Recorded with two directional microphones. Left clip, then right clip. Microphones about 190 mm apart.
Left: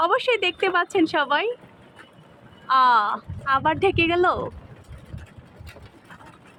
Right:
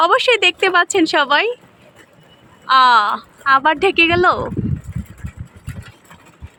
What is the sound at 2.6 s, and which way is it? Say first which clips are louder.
Speech: right 6 dB; 15° right (ahead or behind).